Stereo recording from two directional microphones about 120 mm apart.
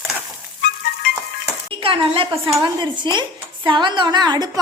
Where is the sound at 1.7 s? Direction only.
50° right (ahead or behind); by 4.6 s 35° right (ahead or behind).